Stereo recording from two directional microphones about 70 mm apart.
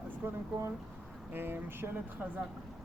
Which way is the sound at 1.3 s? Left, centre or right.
Right.